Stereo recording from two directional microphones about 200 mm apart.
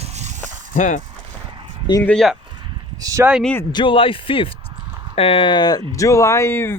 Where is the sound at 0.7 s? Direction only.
40° left (ahead or behind).